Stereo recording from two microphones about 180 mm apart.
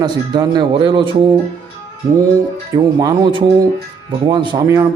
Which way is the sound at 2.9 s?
20° right (ahead or behind).